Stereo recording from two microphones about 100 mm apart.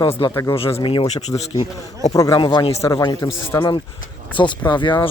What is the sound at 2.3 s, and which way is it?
Speech, 50° left (ahead or behind).